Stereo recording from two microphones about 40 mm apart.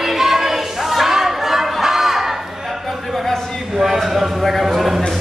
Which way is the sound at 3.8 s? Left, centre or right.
Centre.